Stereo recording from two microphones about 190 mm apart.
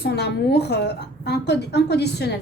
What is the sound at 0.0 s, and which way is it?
A woman's voice, 60° left (ahead or behind).